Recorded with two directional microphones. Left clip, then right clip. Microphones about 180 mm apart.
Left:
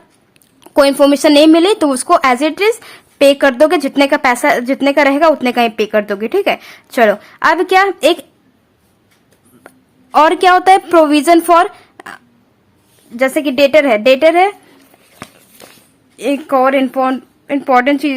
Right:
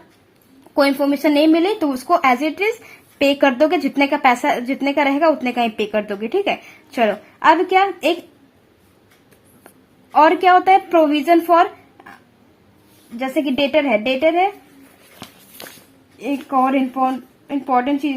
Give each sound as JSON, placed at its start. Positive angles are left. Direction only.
{"t": 0.7, "sound": "speech", "side_deg": 35}
{"t": 9.6, "sound": "a woman's voice", "side_deg": 35}
{"t": 13.1, "sound": "speech", "side_deg": 30}
{"t": 16.1, "sound": "a woman's voice", "side_deg": 30}